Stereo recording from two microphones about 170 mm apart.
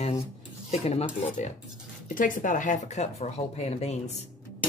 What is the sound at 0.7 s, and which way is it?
Speech, 40° left (ahead or behind).